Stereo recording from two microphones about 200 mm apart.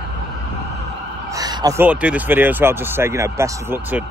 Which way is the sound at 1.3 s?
20° right (ahead or behind).